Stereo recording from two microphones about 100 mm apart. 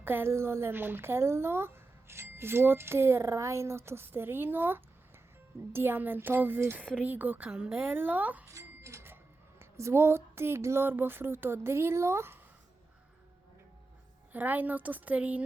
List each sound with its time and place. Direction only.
0.0 s a woman's voice: 20° right (ahead or behind)
8.4 s cash register: 30° right (ahead or behind)
9.6 s speech: 25° right (ahead or behind)
14.3 s a woman's voice: 15° right (ahead or behind)